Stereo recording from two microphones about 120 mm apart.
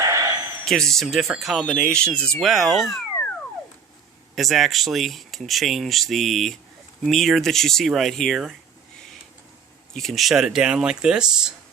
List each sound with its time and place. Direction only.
0.0 s a sound: 30° right (ahead or behind)
0.6 s speech: 5° left (ahead or behind)
4.4 s speech: centre (ahead or behind)
9.9 s speech: centre (ahead or behind)